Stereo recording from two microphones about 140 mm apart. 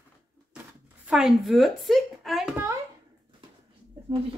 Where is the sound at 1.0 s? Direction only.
5° right (ahead or behind).